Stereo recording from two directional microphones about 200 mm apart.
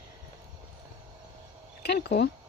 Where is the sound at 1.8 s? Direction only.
50° left (ahead or behind).